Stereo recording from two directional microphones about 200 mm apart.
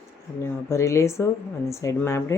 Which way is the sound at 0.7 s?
15° left (ahead or behind).